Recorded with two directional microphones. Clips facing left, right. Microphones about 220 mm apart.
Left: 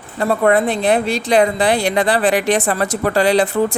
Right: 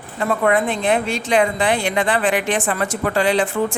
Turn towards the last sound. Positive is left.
turn(degrees=40)  # may be behind; listen again after turning